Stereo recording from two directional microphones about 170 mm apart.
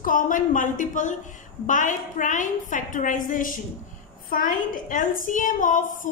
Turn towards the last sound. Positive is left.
turn(degrees=50)  # may be behind; listen again after turning